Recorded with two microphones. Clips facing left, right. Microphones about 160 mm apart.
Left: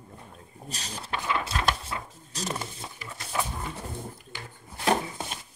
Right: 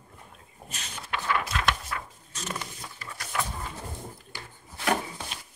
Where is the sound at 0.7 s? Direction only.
35° left (ahead or behind).